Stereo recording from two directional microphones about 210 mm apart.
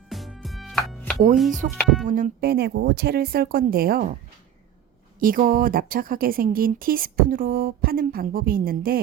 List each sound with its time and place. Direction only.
0.1 s music: centre (ahead or behind)
1.7 s speech: centre (ahead or behind)
2.0 s speech: 40° right (ahead or behind)
5.2 s speech: 40° right (ahead or behind)